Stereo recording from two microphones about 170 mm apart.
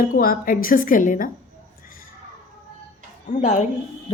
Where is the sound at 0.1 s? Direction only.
55° left (ahead or behind).